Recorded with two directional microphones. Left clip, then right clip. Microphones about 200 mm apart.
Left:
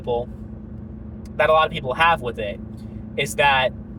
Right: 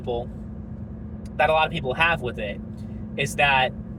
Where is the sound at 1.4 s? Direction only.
25° left (ahead or behind).